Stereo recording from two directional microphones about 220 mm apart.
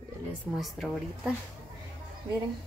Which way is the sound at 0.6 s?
Centre (ahead or behind).